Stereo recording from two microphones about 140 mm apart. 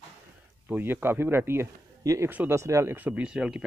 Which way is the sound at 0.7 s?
15° right (ahead or behind).